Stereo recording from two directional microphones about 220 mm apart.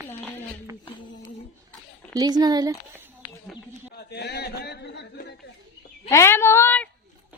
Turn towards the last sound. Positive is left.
turn(degrees=10)  # may be behind; listen again after turning